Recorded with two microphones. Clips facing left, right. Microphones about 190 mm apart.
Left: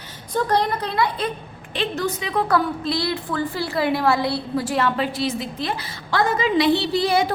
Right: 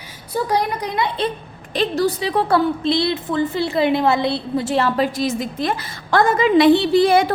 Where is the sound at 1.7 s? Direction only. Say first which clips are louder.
Right 5 dB; 35° right (ahead or behind).